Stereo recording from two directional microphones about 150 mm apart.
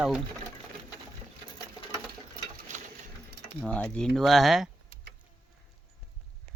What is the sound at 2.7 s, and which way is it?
Coin, 55° right (ahead or behind).